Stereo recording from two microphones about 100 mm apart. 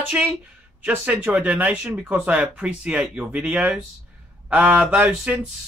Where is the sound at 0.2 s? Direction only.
10° right (ahead or behind).